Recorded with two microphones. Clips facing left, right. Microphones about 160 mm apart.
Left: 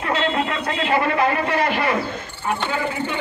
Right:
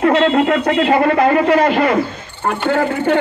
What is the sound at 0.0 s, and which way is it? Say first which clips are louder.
Speech: right 9 dB; 65° right (ahead or behind).